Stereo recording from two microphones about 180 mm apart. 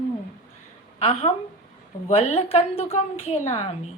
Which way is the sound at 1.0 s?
35° left (ahead or behind).